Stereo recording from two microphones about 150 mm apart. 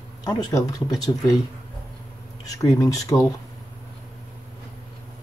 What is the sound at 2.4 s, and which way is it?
Speech, 20° left (ahead or behind).